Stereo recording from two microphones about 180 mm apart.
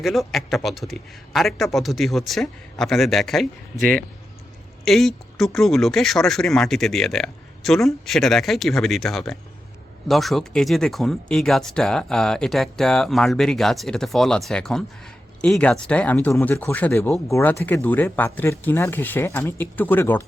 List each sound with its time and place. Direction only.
0.0 s speech: centre (ahead or behind)
3.8 s speech: 50° right (ahead or behind)
4.9 s speech: centre (ahead or behind)